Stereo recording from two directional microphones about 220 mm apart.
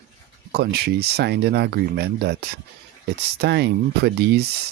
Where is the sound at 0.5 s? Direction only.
45° right (ahead or behind).